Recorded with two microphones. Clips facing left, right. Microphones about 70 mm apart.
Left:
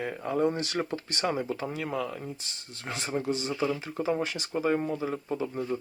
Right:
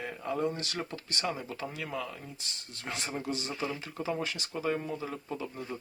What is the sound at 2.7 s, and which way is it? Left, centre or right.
Speech, centre.